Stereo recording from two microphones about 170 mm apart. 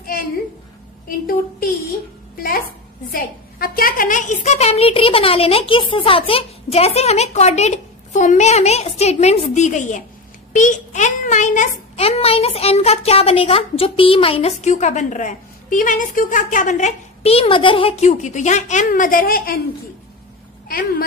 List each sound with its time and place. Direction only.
2.3 s a woman's voice: 60° left (ahead or behind)
20.6 s speech: 60° left (ahead or behind)